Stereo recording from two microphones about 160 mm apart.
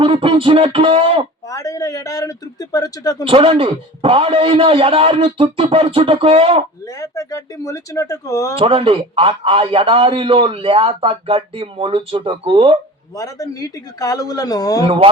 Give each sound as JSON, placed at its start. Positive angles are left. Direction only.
{"t": 0.0, "sound": "a man's voice", "side_deg": -35}
{"t": 1.5, "sound": "speech", "side_deg": 20}
{"t": 3.2, "sound": "a man's voice", "side_deg": -35}
{"t": 6.8, "sound": "speech", "side_deg": 20}
{"t": 8.5, "sound": "a man's voice", "side_deg": -35}
{"t": 13.1, "sound": "speech", "side_deg": 20}
{"t": 14.8, "sound": "a man's voice", "side_deg": -35}